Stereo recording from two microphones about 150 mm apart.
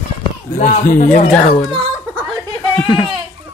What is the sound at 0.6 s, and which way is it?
Speech, 60° left (ahead or behind).